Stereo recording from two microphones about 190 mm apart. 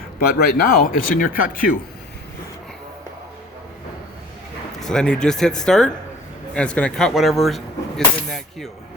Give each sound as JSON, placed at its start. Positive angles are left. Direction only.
{"t": 0.2, "sound": "speech", "side_deg": 50}
{"t": 4.8, "sound": "speech", "side_deg": 5}